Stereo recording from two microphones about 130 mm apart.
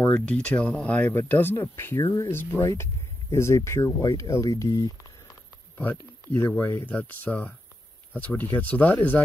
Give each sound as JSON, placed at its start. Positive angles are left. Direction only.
{"t": 0.0, "sound": "speech", "side_deg": 10}
{"t": 5.8, "sound": "speech", "side_deg": 15}